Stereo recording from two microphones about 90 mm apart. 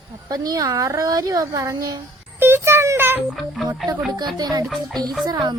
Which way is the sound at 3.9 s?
45° right (ahead or behind).